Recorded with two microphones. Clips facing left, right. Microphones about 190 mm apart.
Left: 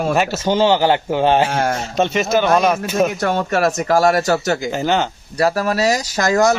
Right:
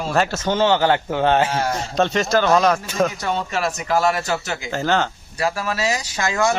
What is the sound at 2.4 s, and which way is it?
Speech, 15° left (ahead or behind).